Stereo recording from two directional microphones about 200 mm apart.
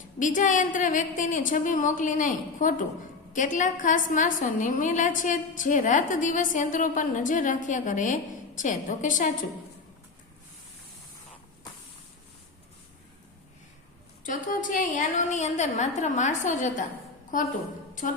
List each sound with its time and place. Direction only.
0.2 s a woman's voice: 40° left (ahead or behind)
14.3 s a woman's voice: 40° left (ahead or behind)